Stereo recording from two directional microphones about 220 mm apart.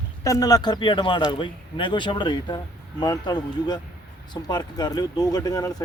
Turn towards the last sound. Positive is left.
turn(degrees=15)  # may be behind; listen again after turning